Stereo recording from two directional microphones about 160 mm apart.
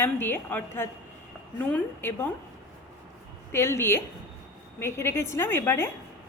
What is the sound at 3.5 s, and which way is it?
A woman's voice, 15° left (ahead or behind).